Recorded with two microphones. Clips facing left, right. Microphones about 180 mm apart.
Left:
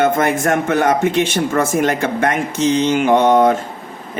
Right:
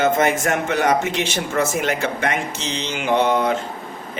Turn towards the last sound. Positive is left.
turn(degrees=50)  # may be behind; listen again after turning